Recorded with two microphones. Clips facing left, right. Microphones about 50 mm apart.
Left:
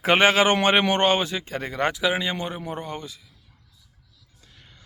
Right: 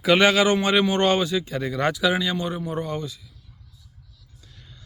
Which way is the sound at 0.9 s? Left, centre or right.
Left.